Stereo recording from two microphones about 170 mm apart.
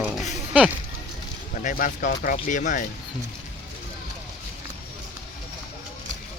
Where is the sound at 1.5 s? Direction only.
55° left (ahead or behind).